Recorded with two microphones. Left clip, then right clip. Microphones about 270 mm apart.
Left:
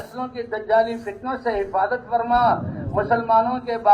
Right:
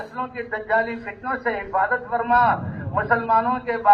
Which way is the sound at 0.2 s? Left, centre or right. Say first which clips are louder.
Even; right.